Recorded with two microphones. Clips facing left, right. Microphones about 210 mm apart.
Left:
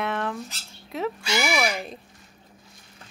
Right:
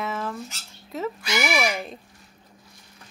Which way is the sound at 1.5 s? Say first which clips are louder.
Right 1 dB; 15° right (ahead or behind).